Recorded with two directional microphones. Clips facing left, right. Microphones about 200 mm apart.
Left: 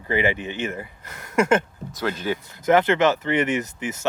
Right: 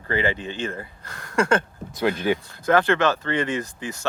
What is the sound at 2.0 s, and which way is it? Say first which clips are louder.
Speech: right 4 dB; 15° right (ahead or behind).